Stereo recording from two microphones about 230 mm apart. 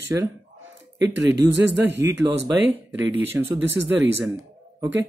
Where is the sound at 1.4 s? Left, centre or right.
Centre.